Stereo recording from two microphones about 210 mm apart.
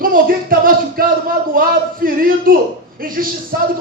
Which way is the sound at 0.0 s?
45° right (ahead or behind).